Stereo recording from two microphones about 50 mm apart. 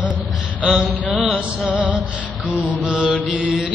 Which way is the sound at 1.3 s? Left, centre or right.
Right.